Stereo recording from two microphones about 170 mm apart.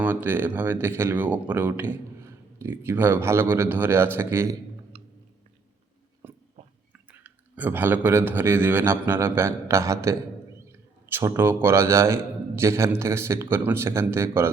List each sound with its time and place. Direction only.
0.0 s speech: 10° right (ahead or behind)
4.9 s chewing: 35° right (ahead or behind)
6.2 s a sound: 15° right (ahead or behind)
7.1 s speech: 10° right (ahead or behind)